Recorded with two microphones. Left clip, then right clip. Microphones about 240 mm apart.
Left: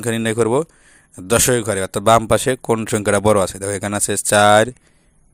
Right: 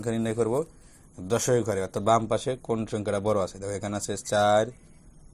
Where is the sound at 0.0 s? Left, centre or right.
Left.